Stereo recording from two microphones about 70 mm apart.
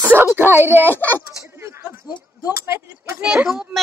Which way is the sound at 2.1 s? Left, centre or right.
Right.